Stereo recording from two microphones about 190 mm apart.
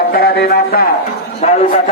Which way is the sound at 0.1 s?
55° left (ahead or behind).